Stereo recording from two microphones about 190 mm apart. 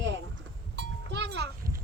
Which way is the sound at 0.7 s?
65° right (ahead or behind).